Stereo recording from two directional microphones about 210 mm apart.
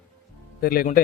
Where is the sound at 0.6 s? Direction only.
45° left (ahead or behind).